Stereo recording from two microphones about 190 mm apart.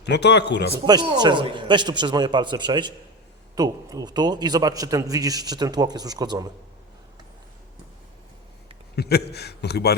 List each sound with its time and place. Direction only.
0.0 s a man's voice: 65° left (ahead or behind)
0.9 s a man's voice: 20° right (ahead or behind)
9.0 s a man's voice: 60° left (ahead or behind)